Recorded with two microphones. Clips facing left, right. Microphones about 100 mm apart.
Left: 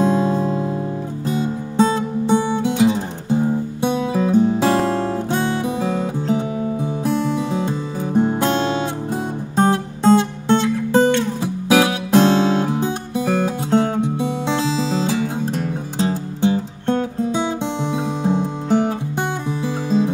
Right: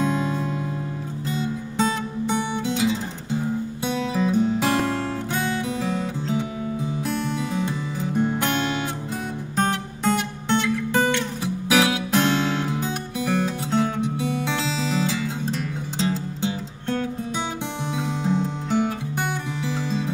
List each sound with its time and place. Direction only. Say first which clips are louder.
0.0 s music: left 6 dB; 25° left (ahead or behind)
3.8 s guitar: left 5 dB; 20° left (ahead or behind)
5.6 s music: left 5 dB; 20° left (ahead or behind)
9.6 s guitar: left 7 dB; 20° left (ahead or behind)
14.1 s music: left 4 dB; 20° left (ahead or behind)